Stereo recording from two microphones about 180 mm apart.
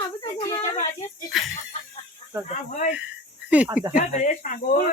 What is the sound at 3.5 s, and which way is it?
Speech, 5° right (ahead or behind).